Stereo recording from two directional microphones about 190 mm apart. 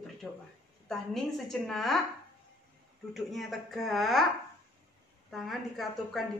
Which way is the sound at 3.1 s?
Centre (ahead or behind).